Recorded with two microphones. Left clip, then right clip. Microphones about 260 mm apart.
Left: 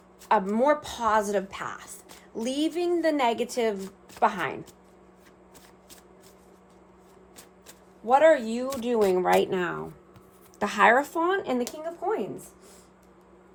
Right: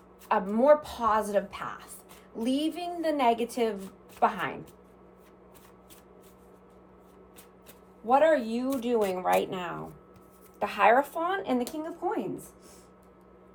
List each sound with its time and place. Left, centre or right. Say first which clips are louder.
0.3 s a woman's voice: even; left
8.0 s speech: left 3 dB; left